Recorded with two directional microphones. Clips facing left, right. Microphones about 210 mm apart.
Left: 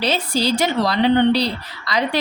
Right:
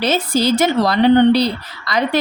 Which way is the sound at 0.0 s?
50° right (ahead or behind).